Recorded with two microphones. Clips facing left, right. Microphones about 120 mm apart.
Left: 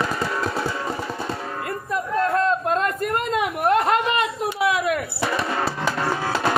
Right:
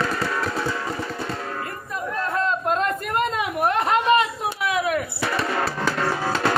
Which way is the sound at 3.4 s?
50° left (ahead or behind).